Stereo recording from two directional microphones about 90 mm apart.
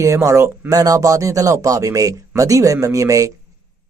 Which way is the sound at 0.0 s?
35° right (ahead or behind).